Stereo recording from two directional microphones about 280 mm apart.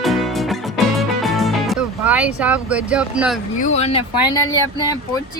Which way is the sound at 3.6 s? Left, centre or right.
Left.